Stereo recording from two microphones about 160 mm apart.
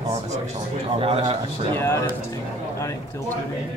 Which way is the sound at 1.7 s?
15° left (ahead or behind).